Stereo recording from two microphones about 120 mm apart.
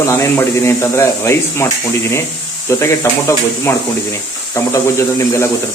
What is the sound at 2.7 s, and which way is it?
Speech, 20° left (ahead or behind).